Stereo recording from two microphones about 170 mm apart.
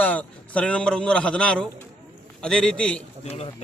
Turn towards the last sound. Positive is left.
turn(degrees=40)  # may be behind; listen again after turning